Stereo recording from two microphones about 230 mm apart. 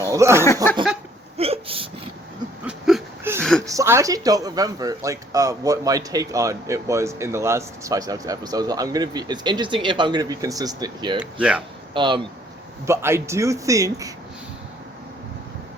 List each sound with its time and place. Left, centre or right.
0.0 s speech: centre
0.4 s speech: centre
1.4 s speech: right
2.6 s a sound: centre
3.7 s speech: centre
11.2 s speech: centre
11.9 s speech: right